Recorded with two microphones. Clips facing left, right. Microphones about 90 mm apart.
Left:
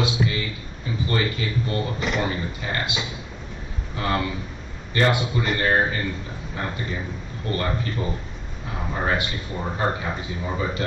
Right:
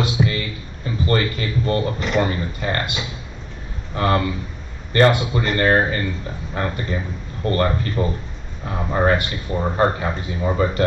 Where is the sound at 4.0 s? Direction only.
55° right (ahead or behind).